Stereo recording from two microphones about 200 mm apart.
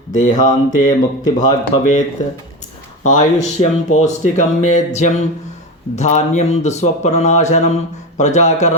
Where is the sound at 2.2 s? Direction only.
35° left (ahead or behind).